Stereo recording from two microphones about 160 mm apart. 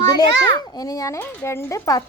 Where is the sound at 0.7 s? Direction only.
20° left (ahead or behind).